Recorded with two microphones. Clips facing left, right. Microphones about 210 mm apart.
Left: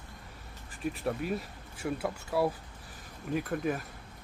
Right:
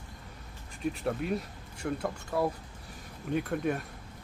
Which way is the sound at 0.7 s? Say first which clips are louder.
Right 1 dB; centre (ahead or behind).